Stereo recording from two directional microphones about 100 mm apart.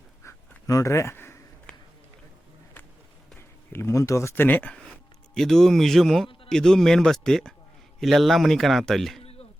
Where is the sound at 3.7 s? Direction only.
25° left (ahead or behind).